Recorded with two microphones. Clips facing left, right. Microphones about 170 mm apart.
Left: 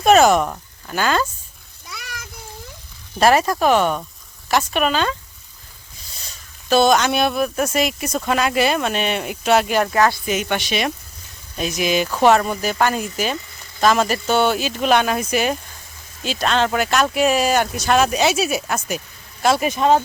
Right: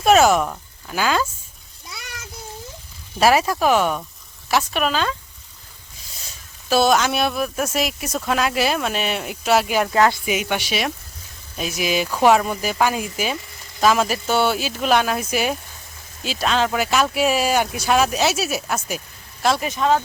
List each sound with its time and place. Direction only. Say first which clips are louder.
0.0 s speech: left 2 dB; 5° right (ahead or behind)
1.9 s a sound: left 2 dB; 25° right (ahead or behind)
3.2 s speech: left 1 dB; 5° right (ahead or behind)
6.7 s speech: left 2 dB; 5° right (ahead or behind)
9.9 s speech: right 2 dB; 20° right (ahead or behind)
10.2 s speech: left 1 dB; 10° right (ahead or behind)
19.6 s speech: left 4 dB; 15° left (ahead or behind)